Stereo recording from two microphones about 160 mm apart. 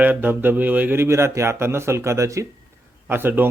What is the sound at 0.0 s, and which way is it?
Speech, 10° right (ahead or behind).